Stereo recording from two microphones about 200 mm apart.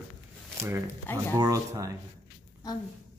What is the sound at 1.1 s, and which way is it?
Speech, 10° left (ahead or behind).